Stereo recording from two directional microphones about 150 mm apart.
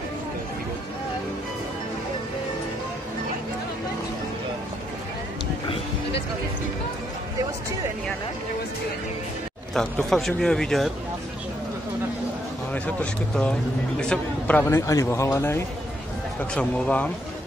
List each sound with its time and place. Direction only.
9.8 s speech: centre (ahead or behind)
12.7 s a man's voice: 10° left (ahead or behind)